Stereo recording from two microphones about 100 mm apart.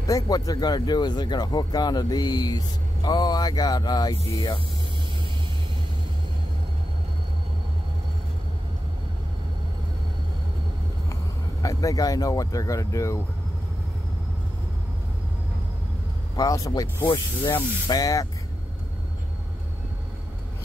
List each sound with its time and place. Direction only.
0.0 s speech: 35° left (ahead or behind)
11.6 s speech: 35° left (ahead or behind)
16.3 s speech: 35° left (ahead or behind)